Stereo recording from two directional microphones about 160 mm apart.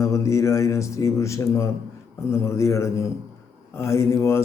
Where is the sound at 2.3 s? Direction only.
15° left (ahead or behind).